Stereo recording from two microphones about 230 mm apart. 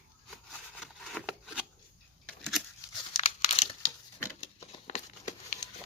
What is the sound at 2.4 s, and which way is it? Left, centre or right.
Tearing, centre.